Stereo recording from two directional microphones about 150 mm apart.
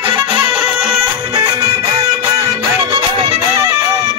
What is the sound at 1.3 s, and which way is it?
Music, 30° right (ahead or behind).